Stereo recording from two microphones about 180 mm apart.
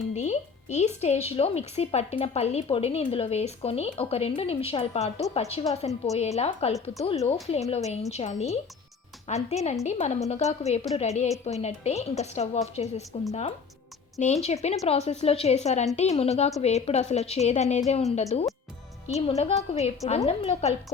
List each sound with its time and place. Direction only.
0.1 s a woman's voice: 40° left (ahead or behind)
14.2 s a woman's voice: 40° left (ahead or behind)